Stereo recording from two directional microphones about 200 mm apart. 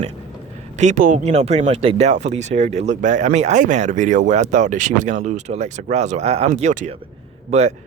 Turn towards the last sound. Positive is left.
turn(degrees=-35)  # may be behind; listen again after turning